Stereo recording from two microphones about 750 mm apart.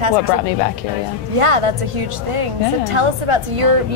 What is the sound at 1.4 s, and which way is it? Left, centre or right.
A woman's voice, right.